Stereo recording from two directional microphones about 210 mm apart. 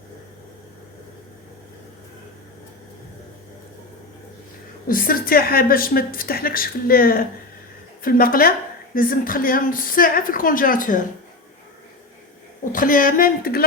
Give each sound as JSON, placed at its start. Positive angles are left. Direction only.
{"t": 4.9, "sound": "a woman's voice", "side_deg": 40}
{"t": 12.7, "sound": "a woman's voice", "side_deg": 40}